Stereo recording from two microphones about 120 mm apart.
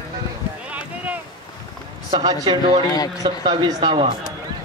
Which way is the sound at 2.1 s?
35° right (ahead or behind).